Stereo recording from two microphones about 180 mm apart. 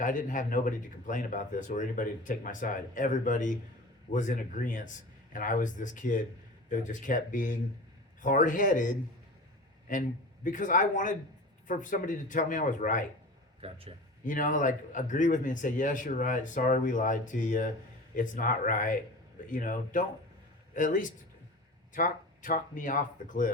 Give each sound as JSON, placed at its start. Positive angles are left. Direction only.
{"t": 0.0, "sound": "speech", "side_deg": 45}
{"t": 13.6, "sound": "a man's voice", "side_deg": -35}
{"t": 14.3, "sound": "speech", "side_deg": 45}